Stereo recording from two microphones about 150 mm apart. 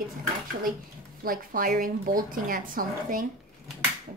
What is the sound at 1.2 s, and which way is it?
Speech, 70° right (ahead or behind).